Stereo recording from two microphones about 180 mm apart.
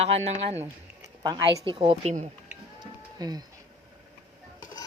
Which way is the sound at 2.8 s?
20° right (ahead or behind).